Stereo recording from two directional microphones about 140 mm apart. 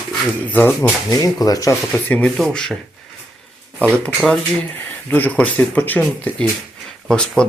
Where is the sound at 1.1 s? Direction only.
25° left (ahead or behind).